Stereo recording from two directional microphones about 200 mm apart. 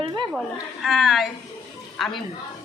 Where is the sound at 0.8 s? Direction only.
Centre (ahead or behind).